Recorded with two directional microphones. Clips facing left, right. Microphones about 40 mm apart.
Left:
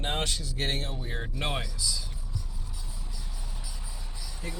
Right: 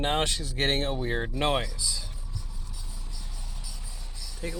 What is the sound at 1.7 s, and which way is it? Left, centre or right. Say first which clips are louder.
Speech: left 1 dB; right.